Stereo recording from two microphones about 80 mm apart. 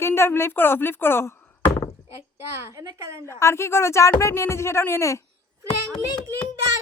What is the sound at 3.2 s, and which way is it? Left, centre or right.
A woman's voice, left.